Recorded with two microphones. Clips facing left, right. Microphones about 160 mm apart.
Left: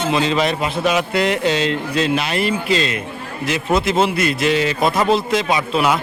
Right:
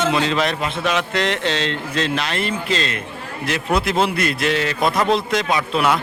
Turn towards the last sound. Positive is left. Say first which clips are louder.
# left 1 dB
turn(degrees=0)  # may be behind; listen again after turning